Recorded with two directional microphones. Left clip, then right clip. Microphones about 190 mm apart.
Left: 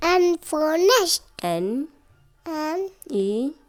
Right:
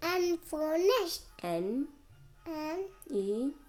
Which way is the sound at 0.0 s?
35° left (ahead or behind).